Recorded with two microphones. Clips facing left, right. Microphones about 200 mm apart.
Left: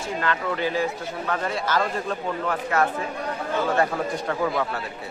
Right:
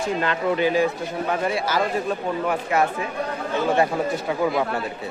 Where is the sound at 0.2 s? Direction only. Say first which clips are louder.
Right 2 dB; 20° right (ahead or behind).